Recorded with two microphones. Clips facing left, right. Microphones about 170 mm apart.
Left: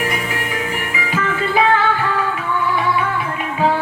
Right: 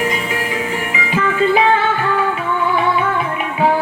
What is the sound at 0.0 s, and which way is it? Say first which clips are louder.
Music: right 3 dB; 20° right (ahead or behind).